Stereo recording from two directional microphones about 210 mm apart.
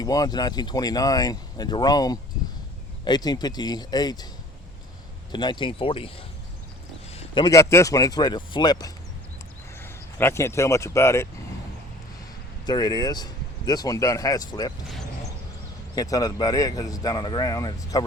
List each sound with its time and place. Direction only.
0.0 s speech: 20° left (ahead or behind)
5.3 s speech: 20° left (ahead or behind)
7.1 s a man's voice: 20° left (ahead or behind)
12.6 s speech: 20° left (ahead or behind)
14.8 s vehicle: centre (ahead or behind)
16.0 s speech: 15° left (ahead or behind)